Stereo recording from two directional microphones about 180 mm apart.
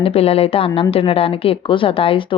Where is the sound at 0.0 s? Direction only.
35° left (ahead or behind).